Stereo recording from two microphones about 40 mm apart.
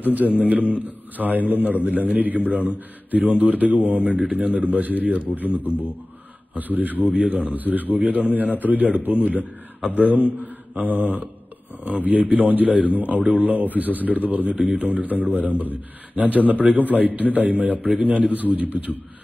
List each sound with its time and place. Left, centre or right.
0.0 s a man's voice: right
5.7 s speech: left
6.5 s a man's voice: right
9.8 s a man's voice: right
10.4 s mantra: right
11.8 s a man's voice: right